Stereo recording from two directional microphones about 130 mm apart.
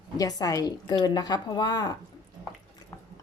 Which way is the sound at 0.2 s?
30° left (ahead or behind).